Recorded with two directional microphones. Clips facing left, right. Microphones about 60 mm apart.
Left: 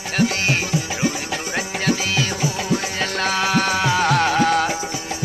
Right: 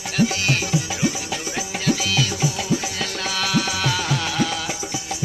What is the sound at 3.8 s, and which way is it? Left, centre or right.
Music, left.